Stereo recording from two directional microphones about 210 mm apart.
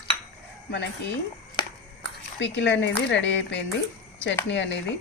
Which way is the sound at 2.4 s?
60° left (ahead or behind).